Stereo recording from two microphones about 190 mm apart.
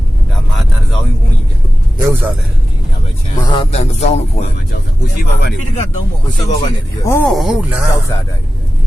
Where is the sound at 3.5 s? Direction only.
30° left (ahead or behind).